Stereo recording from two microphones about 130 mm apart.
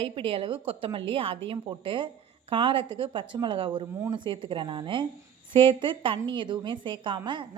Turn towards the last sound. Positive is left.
turn(degrees=-40)  # may be behind; listen again after turning